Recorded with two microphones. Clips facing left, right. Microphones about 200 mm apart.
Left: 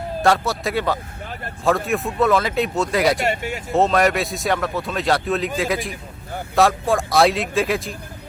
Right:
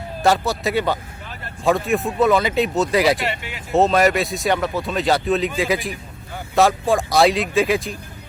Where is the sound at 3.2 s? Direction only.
45° left (ahead or behind).